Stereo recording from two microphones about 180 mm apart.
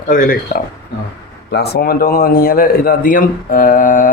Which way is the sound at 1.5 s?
60° left (ahead or behind).